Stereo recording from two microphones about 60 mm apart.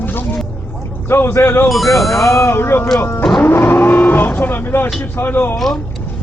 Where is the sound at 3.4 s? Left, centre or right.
Left.